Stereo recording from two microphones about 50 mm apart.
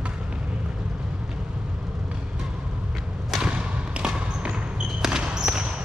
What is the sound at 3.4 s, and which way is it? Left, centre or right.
Basketball bounce, centre.